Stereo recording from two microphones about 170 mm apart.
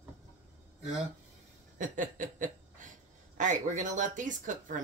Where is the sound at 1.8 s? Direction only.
50° right (ahead or behind).